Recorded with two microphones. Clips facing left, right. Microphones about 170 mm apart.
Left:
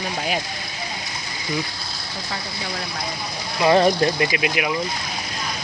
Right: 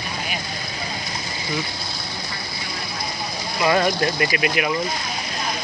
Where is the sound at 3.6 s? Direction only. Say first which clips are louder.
Left 3 dB; 25° left (ahead or behind).